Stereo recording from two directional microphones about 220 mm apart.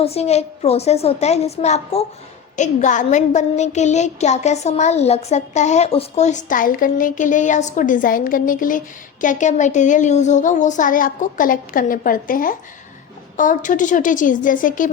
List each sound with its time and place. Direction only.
0.0 s a woman's voice: 30° left (ahead or behind)